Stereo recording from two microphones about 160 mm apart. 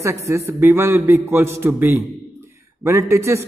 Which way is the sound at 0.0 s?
20° right (ahead or behind).